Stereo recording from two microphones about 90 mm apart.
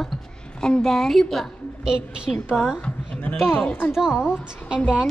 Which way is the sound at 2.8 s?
15° left (ahead or behind).